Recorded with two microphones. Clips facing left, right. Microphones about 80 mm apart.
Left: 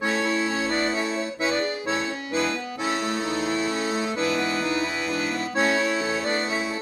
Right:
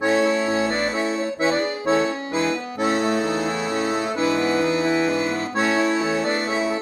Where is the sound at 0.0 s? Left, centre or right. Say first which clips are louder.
Right 5 dB; right.